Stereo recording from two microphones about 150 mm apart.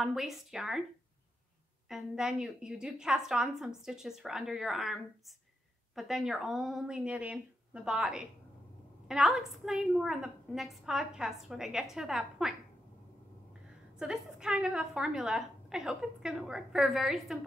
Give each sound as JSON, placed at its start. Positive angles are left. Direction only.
{"t": 0.0, "sound": "a woman's voice", "side_deg": 0}
{"t": 1.9, "sound": "a woman's voice", "side_deg": -5}
{"t": 13.9, "sound": "a woman's voice", "side_deg": -5}